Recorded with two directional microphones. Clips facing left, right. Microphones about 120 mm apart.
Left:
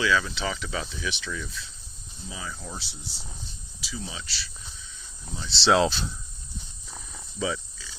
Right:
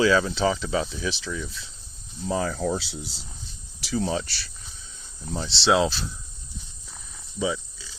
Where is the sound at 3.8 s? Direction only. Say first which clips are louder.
Right 12 dB; 65° right (ahead or behind).